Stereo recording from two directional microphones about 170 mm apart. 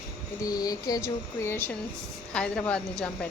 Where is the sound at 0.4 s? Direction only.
20° left (ahead or behind).